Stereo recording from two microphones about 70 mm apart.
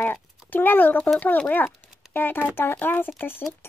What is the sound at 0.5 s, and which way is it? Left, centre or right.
Speech, left.